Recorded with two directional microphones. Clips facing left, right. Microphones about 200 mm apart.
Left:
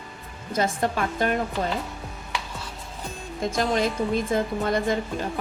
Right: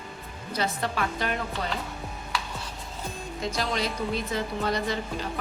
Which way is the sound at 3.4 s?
50° left (ahead or behind).